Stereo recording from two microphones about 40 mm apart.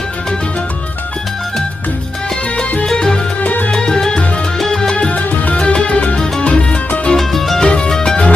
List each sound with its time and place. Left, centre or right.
2.8 s music: centre
3.4 s music: left
3.7 s music: centre
4.6 s salsa music: centre
4.9 s music: left
7.2 s music: centre